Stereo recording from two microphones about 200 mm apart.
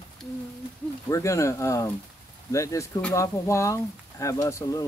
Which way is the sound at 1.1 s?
15° left (ahead or behind).